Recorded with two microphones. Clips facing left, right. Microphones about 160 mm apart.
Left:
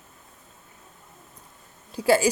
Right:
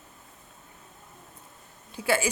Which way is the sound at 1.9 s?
40° left (ahead or behind).